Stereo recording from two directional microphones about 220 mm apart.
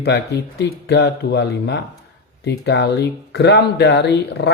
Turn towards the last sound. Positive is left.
turn(degrees=50)  # may be behind; listen again after turning